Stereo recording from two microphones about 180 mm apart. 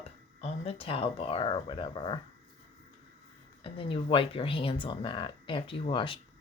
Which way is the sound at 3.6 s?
30° left (ahead or behind).